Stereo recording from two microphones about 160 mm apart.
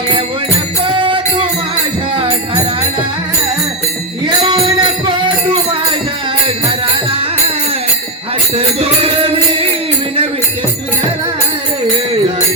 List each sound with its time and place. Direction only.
0.9 s music: 35° right (ahead or behind)
4.4 s music: 30° right (ahead or behind)
8.5 s music: 35° right (ahead or behind)